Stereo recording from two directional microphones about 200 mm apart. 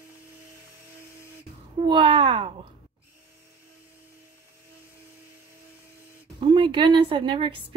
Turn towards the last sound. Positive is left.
turn(degrees=-25)  # may be behind; listen again after turning